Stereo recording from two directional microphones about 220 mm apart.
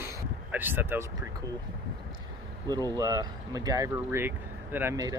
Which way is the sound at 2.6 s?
15° right (ahead or behind).